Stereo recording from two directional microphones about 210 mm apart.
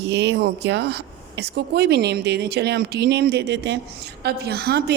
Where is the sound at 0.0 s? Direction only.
55° right (ahead or behind).